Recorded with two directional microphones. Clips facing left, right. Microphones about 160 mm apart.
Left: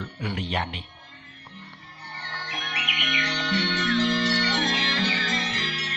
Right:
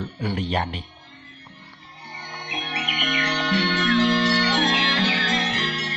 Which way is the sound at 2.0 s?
15° right (ahead or behind).